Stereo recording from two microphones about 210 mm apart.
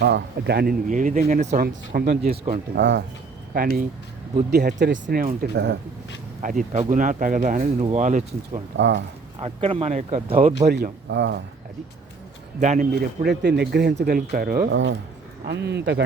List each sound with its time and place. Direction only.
0.0 s speech: 50° right (ahead or behind)
2.7 s speech: 55° right (ahead or behind)
3.5 s speech: 40° right (ahead or behind)
4.5 s speech: 55° right (ahead or behind)
5.0 s speech: 40° right (ahead or behind)
6.4 s speech: 40° right (ahead or behind)
8.7 s speech: 60° right (ahead or behind)
9.4 s speech: 25° right (ahead or behind)
10.7 s speech: 50° right (ahead or behind)
12.5 s speech: 35° right (ahead or behind)
14.7 s speech: 60° right (ahead or behind)